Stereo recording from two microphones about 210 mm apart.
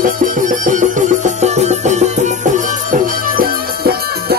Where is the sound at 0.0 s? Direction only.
40° right (ahead or behind).